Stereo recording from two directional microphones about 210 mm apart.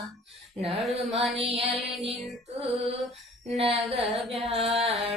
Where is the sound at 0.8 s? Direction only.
Centre (ahead or behind).